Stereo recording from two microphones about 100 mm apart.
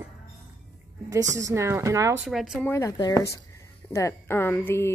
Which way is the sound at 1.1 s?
30° right (ahead or behind).